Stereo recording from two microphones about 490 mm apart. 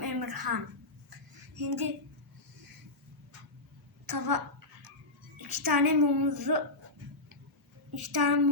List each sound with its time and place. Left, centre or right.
0.0 s a sound: right
1.5 s speech: right
4.0 s a woman's voice: right
7.9 s a woman's voice: right